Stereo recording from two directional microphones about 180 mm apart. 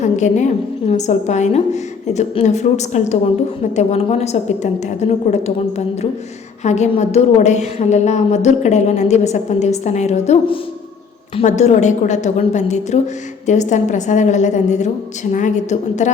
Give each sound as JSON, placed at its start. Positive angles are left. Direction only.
{"t": 0.0, "sound": "a woman's voice", "side_deg": 40}